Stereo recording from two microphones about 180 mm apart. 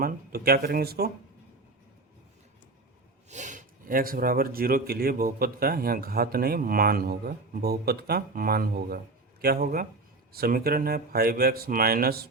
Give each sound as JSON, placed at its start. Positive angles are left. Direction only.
{"t": 0.0, "sound": "speech", "side_deg": -55}
{"t": 3.2, "sound": "speech", "side_deg": -40}